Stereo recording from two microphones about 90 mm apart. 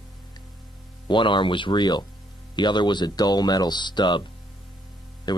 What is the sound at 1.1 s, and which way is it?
Speech, 65° left (ahead or behind).